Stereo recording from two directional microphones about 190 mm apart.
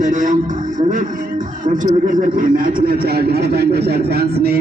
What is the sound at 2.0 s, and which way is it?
A man's voice, 45° right (ahead or behind).